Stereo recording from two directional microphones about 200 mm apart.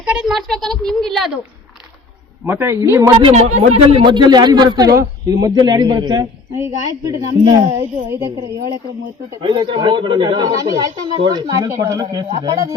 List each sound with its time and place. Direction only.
0.0 s speech: 5° right (ahead or behind)
2.5 s speech: 10° right (ahead or behind)
3.2 s speech: 30° right (ahead or behind)
4.0 s speech: 20° right (ahead or behind)
9.4 s speech: 25° right (ahead or behind)